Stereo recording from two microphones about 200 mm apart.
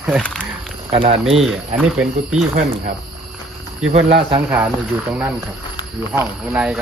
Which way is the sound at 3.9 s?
30° right (ahead or behind).